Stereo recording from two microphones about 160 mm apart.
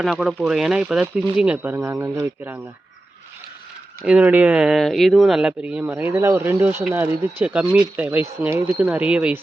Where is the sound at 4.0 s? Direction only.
10° right (ahead or behind).